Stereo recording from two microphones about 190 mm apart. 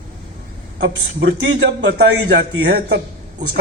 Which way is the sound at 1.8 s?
65° right (ahead or behind).